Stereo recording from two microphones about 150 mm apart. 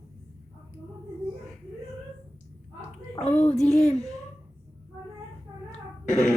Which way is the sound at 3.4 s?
50° left (ahead or behind).